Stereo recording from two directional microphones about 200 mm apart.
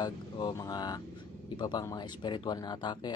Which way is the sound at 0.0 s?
20° left (ahead or behind).